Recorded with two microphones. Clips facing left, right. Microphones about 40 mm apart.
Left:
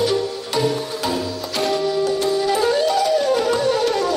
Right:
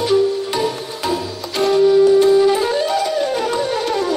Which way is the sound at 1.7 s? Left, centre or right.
Centre.